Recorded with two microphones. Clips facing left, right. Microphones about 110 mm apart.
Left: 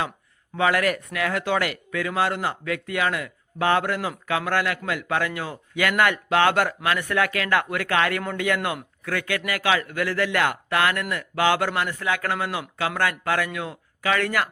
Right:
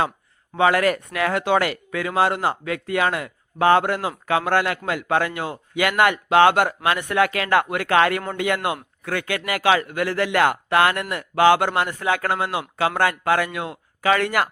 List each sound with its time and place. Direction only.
0.5 s speech: 30° right (ahead or behind)